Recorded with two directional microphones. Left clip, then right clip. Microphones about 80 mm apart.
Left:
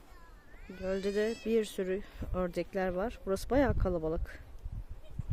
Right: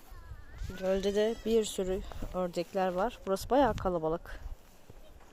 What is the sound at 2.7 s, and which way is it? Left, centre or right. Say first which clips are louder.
Speech: right 5 dB; left.